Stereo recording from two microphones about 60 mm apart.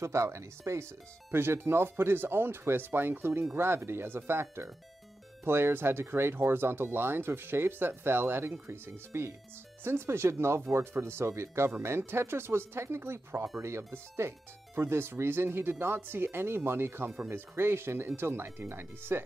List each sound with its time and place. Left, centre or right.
0.0 s speech: right
1.3 s speech: right